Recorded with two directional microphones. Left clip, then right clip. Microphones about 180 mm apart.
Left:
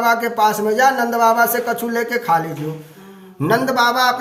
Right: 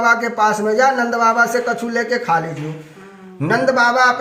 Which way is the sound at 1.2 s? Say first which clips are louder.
Left 1 dB; 65° left (ahead or behind).